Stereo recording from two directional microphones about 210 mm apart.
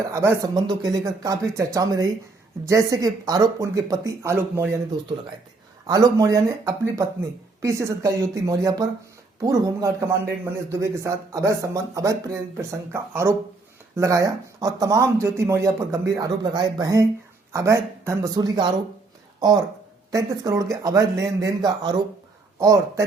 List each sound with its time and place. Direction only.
0.0 s speech: 15° right (ahead or behind)
5.8 s speech: 15° right (ahead or behind)
20.1 s speech: 15° right (ahead or behind)